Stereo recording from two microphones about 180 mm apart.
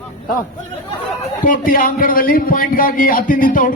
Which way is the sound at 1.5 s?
50° left (ahead or behind).